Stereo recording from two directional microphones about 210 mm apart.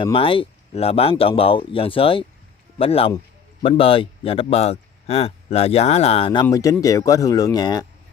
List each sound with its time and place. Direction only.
0.0 s speech: 25° left (ahead or behind)
6.4 s speech: 15° left (ahead or behind)